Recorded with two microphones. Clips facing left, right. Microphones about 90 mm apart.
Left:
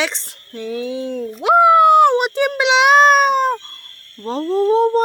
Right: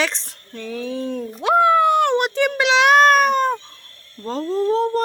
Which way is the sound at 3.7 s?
10° right (ahead or behind).